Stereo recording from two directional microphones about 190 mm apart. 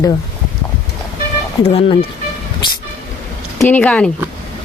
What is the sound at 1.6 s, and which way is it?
Speech, 30° left (ahead or behind).